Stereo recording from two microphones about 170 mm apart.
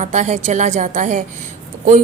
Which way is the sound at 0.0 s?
45° right (ahead or behind).